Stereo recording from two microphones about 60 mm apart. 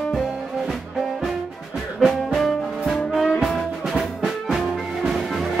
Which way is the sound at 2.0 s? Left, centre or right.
Centre.